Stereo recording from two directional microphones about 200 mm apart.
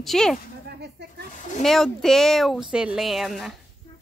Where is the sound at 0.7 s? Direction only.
55° right (ahead or behind).